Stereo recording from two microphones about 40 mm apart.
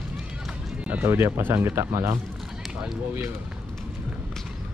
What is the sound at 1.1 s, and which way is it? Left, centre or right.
Speech, right.